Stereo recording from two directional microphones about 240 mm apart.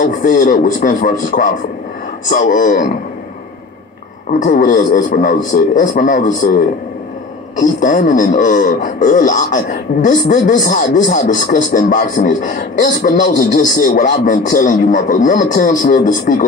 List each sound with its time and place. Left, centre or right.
0.0 s speech: left
4.3 s speech: left
7.6 s speech: left